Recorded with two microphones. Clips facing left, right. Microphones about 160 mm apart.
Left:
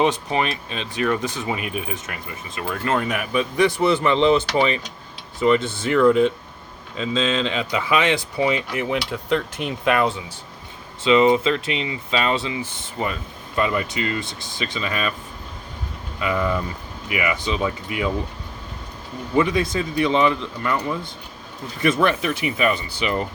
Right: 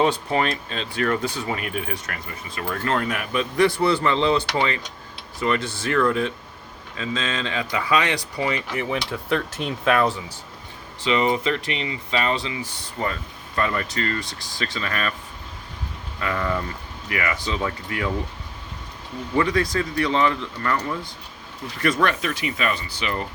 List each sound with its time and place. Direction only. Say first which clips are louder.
0.0 s speech: even; 20° left (ahead or behind)
5.9 s speech: left 6 dB; 15° left (ahead or behind)
11.0 s speech: left 5 dB; 25° left (ahead or behind)
13.6 s speech: left 2 dB; 15° left (ahead or behind)
16.2 s speech: left 3 dB; 10° left (ahead or behind)
19.4 s speech: left 2 dB; 20° left (ahead or behind); by 22.4 s 5° left (ahead or behind)
22.4 s speech: left 4 dB; 20° left (ahead or behind)